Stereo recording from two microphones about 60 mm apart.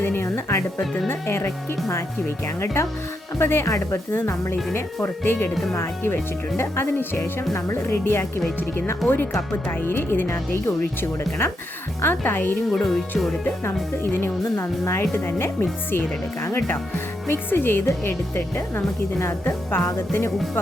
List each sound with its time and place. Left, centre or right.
0.0 s music: left
1.0 s speech: left
2.8 s speech: left
3.7 s speech: left
4.1 s speech: left
6.6 s speech: left
9.8 s speech: left
12.0 s speech: left
12.7 s speech: centre
14.0 s speech: left
15.1 s speech: left